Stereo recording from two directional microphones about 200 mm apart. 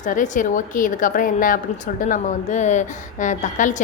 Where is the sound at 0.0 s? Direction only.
40° left (ahead or behind).